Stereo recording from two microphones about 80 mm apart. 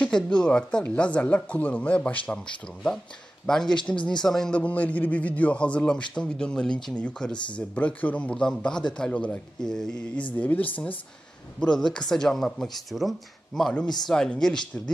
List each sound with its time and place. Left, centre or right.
0.0 s speech: centre
10.3 s speech: left
11.6 s speech: centre